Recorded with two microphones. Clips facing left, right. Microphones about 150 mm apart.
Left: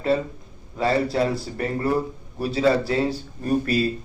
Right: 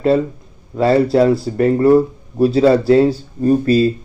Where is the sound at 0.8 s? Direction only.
35° right (ahead or behind).